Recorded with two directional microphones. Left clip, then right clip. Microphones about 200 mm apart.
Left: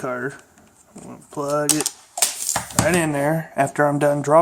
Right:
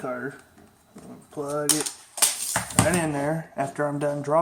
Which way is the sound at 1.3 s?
40° left (ahead or behind).